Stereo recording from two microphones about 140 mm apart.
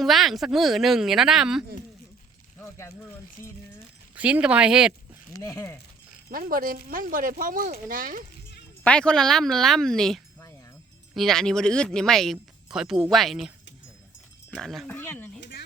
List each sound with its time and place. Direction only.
0.0 s speech: centre (ahead or behind)
2.6 s speech: 20° left (ahead or behind)
4.1 s speech: 10° right (ahead or behind)
5.3 s speech: 25° left (ahead or behind)
6.3 s speech: 90° right
8.8 s speech: 5° left (ahead or behind)
14.5 s speech: 5° left (ahead or behind)
14.9 s speech: 15° left (ahead or behind)